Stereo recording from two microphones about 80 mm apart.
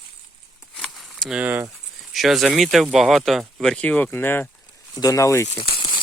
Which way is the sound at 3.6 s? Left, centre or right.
Centre.